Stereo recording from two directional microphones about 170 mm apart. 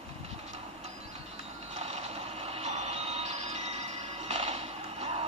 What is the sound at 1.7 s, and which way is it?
Train, 40° right (ahead or behind).